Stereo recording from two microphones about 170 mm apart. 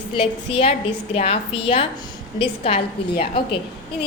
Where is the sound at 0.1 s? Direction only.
35° left (ahead or behind).